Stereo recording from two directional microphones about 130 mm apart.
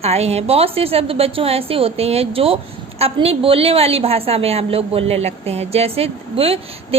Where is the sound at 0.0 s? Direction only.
55° right (ahead or behind).